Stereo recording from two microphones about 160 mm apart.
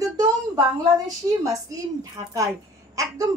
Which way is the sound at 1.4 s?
20° right (ahead or behind).